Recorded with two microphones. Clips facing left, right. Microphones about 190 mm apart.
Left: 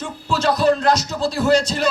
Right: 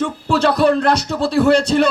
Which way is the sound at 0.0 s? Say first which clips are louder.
Right 5 dB; 60° right (ahead or behind).